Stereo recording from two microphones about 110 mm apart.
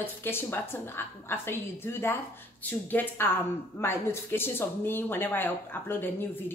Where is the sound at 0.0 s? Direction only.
20° left (ahead or behind).